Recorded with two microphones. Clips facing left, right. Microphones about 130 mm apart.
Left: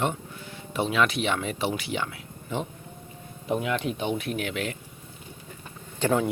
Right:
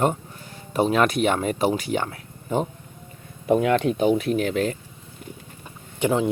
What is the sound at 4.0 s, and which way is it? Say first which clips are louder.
Speech: right 8 dB; 40° right (ahead or behind).